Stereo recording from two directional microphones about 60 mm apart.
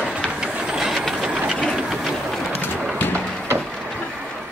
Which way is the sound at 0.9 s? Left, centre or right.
Centre.